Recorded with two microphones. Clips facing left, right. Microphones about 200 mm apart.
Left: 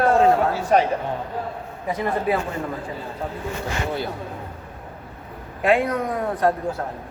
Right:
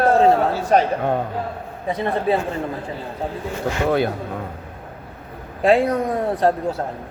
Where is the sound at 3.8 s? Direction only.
65° right (ahead or behind).